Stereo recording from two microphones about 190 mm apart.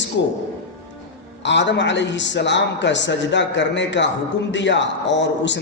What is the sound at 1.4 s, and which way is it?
Speech, 70° left (ahead or behind).